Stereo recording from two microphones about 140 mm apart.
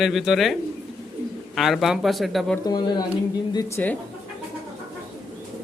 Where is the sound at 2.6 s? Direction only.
30° left (ahead or behind).